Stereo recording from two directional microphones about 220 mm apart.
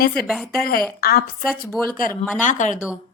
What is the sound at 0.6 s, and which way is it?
Speech, 40° left (ahead or behind).